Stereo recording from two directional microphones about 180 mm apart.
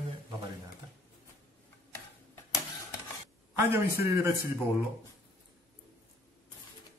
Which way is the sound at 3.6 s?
15° right (ahead or behind).